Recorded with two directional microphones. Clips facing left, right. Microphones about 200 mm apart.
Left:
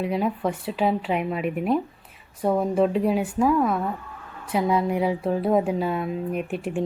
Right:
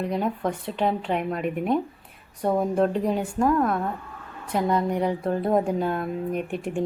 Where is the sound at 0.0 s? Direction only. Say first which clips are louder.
Left 1 dB; 5° left (ahead or behind).